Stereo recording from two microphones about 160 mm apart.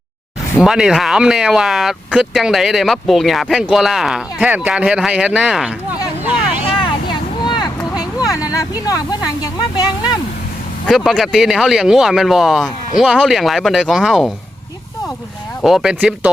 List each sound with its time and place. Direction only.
0.6 s speech: 5° right (ahead or behind)
7.4 s vehicle: 25° left (ahead or behind)
10.8 s speech: centre (ahead or behind)
15.6 s speech: centre (ahead or behind)